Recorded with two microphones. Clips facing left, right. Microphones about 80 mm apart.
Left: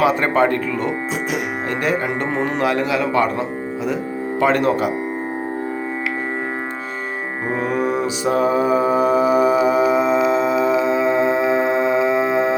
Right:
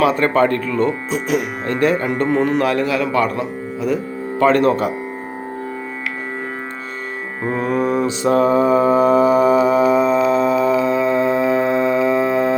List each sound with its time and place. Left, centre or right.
0.0 s a man's voice: centre
4.4 s speech: centre
7.5 s mantra: centre